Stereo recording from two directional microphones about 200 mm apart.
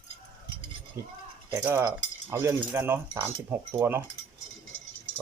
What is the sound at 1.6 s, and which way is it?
Cutlery, 10° right (ahead or behind).